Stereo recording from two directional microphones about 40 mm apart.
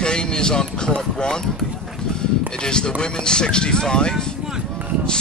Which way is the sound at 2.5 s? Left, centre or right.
Centre.